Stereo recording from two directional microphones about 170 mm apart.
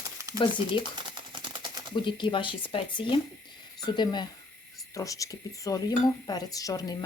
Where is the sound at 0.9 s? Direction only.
30° right (ahead or behind).